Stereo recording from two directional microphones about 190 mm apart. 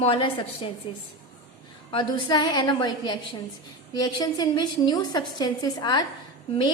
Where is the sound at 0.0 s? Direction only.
25° left (ahead or behind).